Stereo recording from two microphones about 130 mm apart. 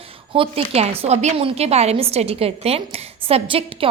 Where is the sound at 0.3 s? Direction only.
50° right (ahead or behind).